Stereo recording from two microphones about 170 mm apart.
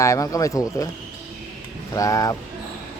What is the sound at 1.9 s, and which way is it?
Speech, 20° left (ahead or behind).